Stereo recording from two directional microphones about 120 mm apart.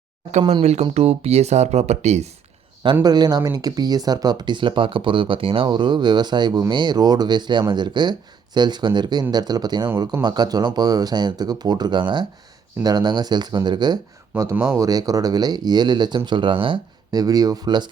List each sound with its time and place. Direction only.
0.3 s speech: 70° right (ahead or behind)
2.8 s speech: 40° right (ahead or behind)